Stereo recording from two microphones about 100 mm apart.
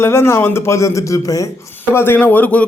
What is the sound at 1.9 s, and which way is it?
Speech, 20° left (ahead or behind).